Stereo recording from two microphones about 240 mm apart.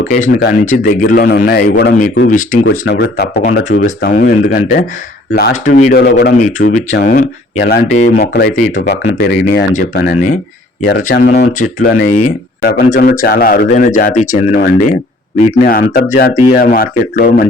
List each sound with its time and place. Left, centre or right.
0.1 s speech: left
2.6 s speech: left